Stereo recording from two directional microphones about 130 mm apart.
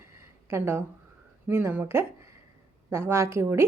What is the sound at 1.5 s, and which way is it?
A woman's voice, 15° right (ahead or behind).